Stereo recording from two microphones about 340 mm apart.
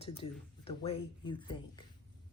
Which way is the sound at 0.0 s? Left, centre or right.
Centre.